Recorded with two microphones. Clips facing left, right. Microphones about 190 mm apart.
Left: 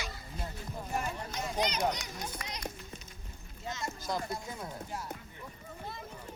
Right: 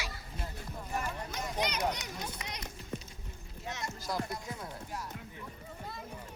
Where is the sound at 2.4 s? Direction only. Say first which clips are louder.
Even; 20° right (ahead or behind).